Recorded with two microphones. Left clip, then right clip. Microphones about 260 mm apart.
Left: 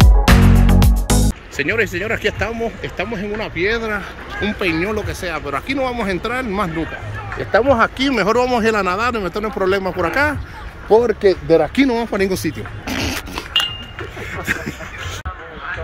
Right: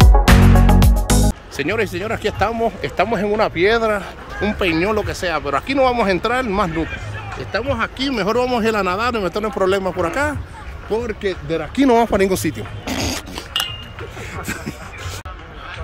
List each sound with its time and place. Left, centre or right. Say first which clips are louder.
0.0 s speech: right 1 dB; centre
7.5 s speech: left 8 dB; left
8.0 s speech: left 3 dB; centre
10.9 s speech: left 9 dB; centre
11.9 s speech: right 4 dB; centre
14.4 s a sound: left 7 dB; centre